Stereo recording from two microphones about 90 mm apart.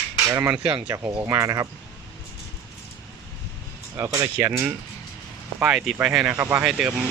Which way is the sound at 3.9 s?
35° right (ahead or behind).